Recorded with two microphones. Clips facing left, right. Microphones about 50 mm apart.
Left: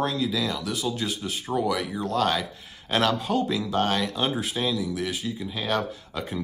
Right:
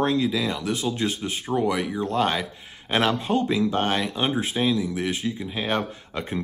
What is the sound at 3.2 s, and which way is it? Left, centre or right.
Speech, right.